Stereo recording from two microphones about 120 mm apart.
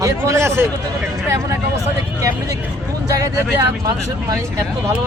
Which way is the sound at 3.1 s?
25° right (ahead or behind).